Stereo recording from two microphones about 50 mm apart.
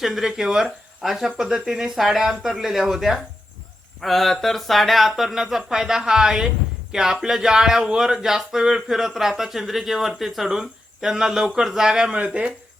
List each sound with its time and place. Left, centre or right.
0.0 s speech: centre
12.1 s speech: right